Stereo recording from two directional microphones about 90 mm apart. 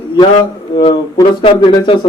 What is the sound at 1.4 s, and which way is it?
Speech, 90° left.